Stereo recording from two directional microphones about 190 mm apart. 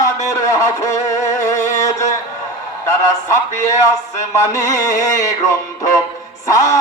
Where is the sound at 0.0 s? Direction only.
15° left (ahead or behind).